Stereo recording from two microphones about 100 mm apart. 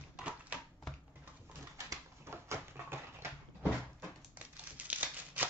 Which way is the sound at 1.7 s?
30° right (ahead or behind).